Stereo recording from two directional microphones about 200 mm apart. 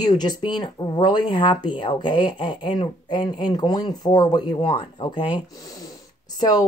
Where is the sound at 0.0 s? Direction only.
20° left (ahead or behind).